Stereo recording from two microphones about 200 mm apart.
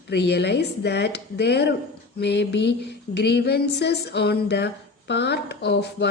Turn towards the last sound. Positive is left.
turn(degrees=60)  # may be behind; listen again after turning